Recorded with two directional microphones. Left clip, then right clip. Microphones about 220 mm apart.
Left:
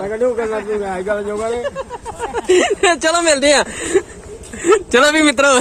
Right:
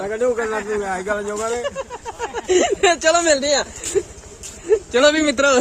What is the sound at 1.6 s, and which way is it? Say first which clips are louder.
Speech: left 3 dB; 15° left (ahead or behind).